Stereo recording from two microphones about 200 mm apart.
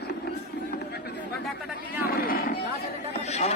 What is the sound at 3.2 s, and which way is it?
Speech, 35° left (ahead or behind).